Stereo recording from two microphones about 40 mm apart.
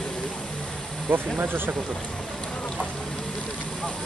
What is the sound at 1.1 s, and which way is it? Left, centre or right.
Speech, right.